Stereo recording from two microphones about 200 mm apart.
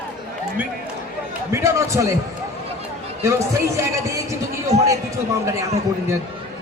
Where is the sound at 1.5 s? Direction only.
15° right (ahead or behind).